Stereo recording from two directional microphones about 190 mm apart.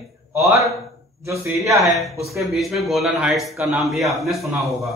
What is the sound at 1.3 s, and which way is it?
Speech, 15° right (ahead or behind).